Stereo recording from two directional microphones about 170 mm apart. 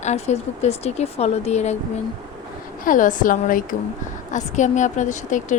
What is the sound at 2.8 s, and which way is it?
A woman's voice, 50° left (ahead or behind).